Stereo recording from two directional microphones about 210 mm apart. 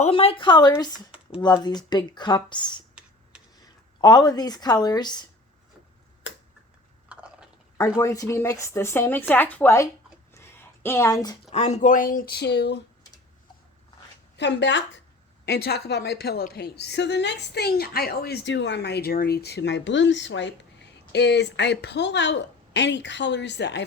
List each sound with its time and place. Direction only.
0.0 s speech: 25° left (ahead or behind)
4.0 s speech: 20° left (ahead or behind)
7.1 s chewing: 5° right (ahead or behind)
7.8 s speech: 10° left (ahead or behind)
10.3 s a sound: 10° left (ahead or behind)
11.5 s a woman's voice: 30° left (ahead or behind); by 12.8 s 50° left (ahead or behind)
14.3 s a woman's voice: 55° left (ahead or behind)